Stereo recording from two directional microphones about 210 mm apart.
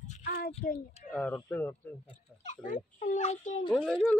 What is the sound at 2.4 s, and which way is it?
A child's voice, 40° left (ahead or behind).